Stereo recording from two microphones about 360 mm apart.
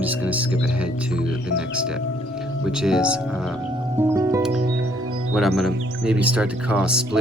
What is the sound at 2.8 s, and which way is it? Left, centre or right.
Speech, centre.